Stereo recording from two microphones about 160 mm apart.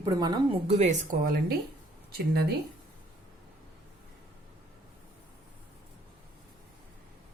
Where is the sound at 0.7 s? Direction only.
45° right (ahead or behind).